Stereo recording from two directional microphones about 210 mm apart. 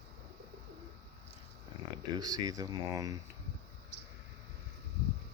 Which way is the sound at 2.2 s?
15° right (ahead or behind).